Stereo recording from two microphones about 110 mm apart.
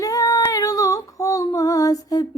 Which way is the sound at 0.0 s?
30° left (ahead or behind).